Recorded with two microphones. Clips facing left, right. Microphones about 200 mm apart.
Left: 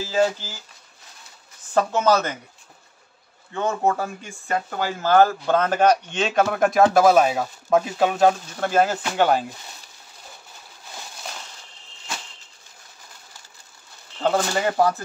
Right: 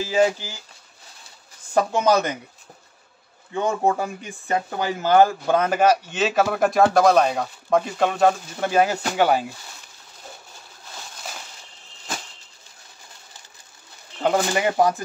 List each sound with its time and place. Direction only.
0.0 s speech: 15° right (ahead or behind)
1.7 s speech: 15° right (ahead or behind)
3.5 s speech: 15° right (ahead or behind); by 8.4 s 5° left (ahead or behind)
8.5 s speech: 10° right (ahead or behind)
14.2 s speech: 15° right (ahead or behind)